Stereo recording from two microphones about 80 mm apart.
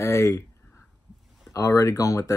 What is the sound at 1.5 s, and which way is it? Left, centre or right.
Speech, left.